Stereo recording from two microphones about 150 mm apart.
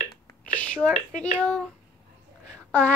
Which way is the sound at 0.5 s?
10° left (ahead or behind).